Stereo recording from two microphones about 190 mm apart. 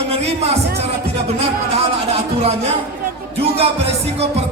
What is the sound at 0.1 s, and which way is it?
Music, 35° right (ahead or behind).